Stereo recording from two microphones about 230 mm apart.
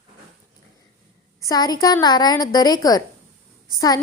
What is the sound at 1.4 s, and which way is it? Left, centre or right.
A woman's voice, centre.